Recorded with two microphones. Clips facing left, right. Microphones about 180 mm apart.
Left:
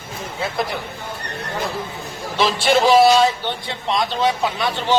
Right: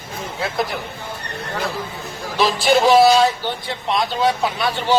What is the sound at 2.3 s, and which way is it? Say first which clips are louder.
Speech: right 1 dB; centre (ahead or behind).